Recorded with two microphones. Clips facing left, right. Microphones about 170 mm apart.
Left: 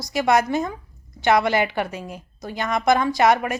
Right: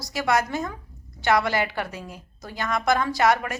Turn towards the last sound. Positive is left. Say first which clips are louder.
# left 3 dB
turn(degrees=20)  # may be behind; listen again after turning